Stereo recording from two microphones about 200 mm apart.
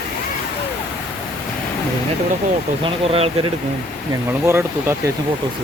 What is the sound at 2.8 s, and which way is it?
Speech, 30° right (ahead or behind).